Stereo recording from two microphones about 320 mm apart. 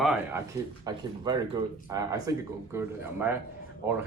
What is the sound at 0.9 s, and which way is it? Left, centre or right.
Speech, centre.